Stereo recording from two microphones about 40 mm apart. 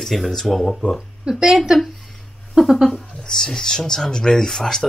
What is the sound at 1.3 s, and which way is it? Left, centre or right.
Speech, centre.